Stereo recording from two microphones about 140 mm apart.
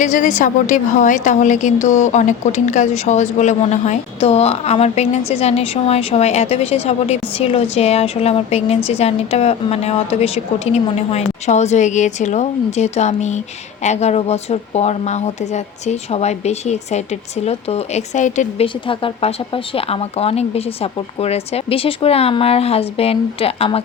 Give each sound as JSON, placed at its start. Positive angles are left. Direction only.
{"t": 0.0, "sound": "a woman's voice", "side_deg": 65}
{"t": 18.6, "sound": "a woman's voice", "side_deg": 40}